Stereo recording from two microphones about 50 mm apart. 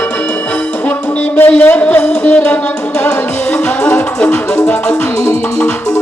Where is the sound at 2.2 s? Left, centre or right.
Left.